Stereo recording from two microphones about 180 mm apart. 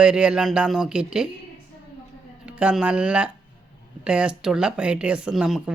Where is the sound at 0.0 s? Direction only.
5° right (ahead or behind).